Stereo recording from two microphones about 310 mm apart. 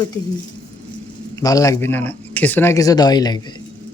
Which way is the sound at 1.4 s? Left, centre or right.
Centre.